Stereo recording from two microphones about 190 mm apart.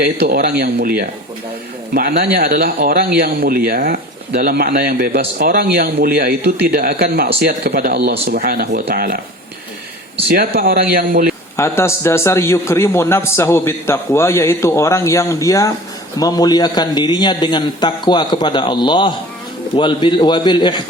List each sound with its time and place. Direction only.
0.0 s speech: 55° right (ahead or behind)
10.2 s speech: 55° right (ahead or behind)
11.5 s a man's voice: 15° left (ahead or behind)